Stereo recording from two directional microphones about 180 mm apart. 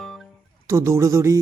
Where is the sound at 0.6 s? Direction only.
15° right (ahead or behind).